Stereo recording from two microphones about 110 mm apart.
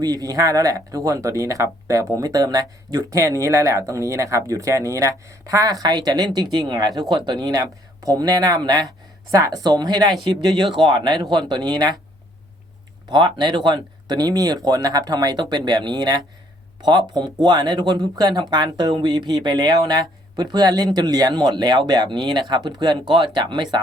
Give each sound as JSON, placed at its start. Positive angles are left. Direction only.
{"t": 0.0, "sound": "speech", "side_deg": -35}
{"t": 13.1, "sound": "speech", "side_deg": -45}